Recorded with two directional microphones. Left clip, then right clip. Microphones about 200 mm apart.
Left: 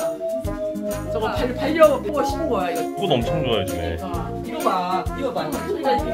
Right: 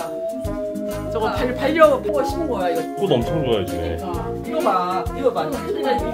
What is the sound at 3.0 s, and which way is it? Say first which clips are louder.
Speech: left 1 dB; 15° right (ahead or behind).